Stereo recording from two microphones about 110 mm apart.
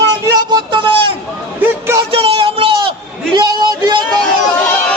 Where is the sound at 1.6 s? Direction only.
20° right (ahead or behind).